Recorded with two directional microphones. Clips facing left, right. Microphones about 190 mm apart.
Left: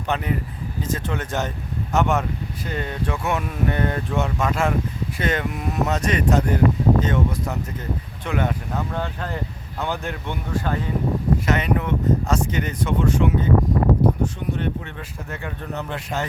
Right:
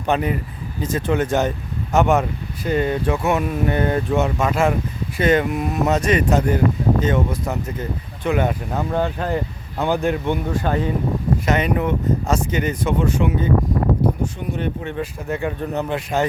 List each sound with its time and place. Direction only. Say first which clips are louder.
0.1 s speech: right 5 dB; 15° right (ahead or behind)
14.6 s speech: right 4 dB; 15° right (ahead or behind)